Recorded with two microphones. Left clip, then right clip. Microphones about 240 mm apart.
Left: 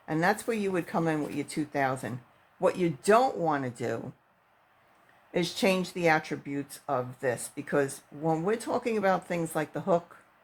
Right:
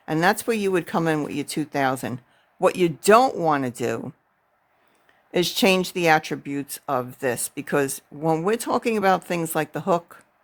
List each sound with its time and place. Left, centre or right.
0.0 s speech: right
5.3 s speech: right